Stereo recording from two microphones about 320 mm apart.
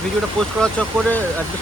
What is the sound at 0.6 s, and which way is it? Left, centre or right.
Speech, centre.